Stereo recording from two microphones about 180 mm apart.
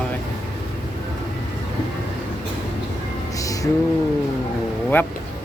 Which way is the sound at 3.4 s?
20° left (ahead or behind).